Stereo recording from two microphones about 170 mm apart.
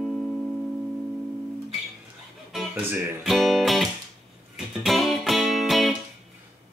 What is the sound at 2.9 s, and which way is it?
Speech, centre (ahead or behind).